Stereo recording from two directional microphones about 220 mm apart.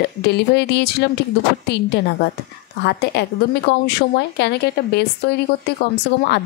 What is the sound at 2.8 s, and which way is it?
A woman's voice, 50° left (ahead or behind).